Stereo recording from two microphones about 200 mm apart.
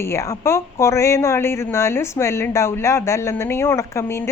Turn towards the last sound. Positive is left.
turn(degrees=15)  # may be behind; listen again after turning